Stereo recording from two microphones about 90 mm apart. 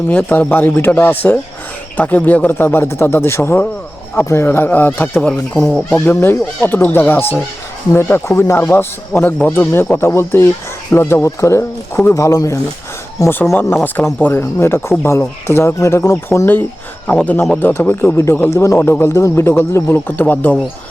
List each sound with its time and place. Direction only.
0.1 s speech: 15° left (ahead or behind)
5.5 s speech: centre (ahead or behind)
6.1 s speech: 25° left (ahead or behind)
13.5 s speech: 25° left (ahead or behind)
17.1 s speech: 15° left (ahead or behind)